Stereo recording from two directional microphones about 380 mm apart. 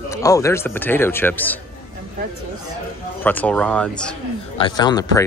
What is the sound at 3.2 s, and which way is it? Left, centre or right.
Speech, centre.